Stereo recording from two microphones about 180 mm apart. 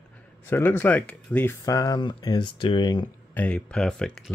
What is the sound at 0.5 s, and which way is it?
Speech, 10° left (ahead or behind).